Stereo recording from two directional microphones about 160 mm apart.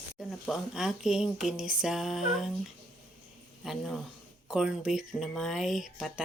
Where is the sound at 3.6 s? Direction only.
Centre (ahead or behind).